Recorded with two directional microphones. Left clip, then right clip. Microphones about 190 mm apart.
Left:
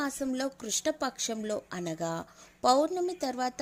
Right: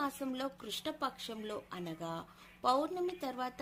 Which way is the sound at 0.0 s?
40° left (ahead or behind).